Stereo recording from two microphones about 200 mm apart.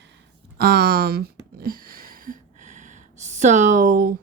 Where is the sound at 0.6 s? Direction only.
50° right (ahead or behind).